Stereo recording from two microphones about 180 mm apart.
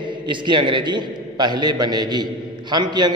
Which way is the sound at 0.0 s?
25° right (ahead or behind).